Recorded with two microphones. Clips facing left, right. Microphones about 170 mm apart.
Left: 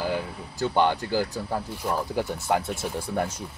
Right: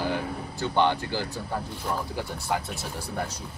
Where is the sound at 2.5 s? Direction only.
50° left (ahead or behind).